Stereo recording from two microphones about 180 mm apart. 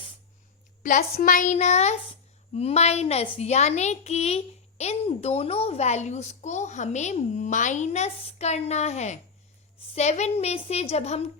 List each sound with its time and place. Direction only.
0.8 s a woman's voice: 45° left (ahead or behind)